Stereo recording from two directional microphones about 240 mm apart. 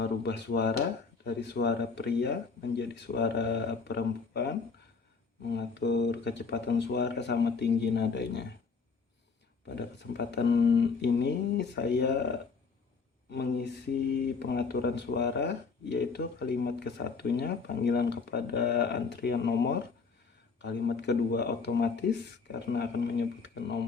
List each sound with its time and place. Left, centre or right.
0.0 s speech: left
9.6 s speech: left